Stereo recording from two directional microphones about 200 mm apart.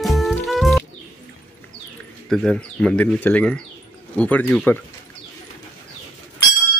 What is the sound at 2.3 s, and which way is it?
Speech, 5° left (ahead or behind).